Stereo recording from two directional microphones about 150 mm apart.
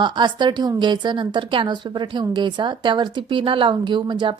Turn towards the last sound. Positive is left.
turn(degrees=-30)  # may be behind; listen again after turning